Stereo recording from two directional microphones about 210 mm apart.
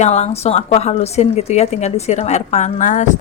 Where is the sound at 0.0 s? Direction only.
30° left (ahead or behind).